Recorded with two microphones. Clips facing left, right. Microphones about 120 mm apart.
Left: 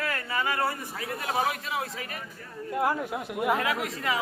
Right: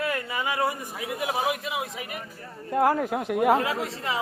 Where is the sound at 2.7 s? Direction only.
45° right (ahead or behind).